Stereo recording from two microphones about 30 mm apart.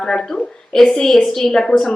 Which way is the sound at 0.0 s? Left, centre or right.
Left.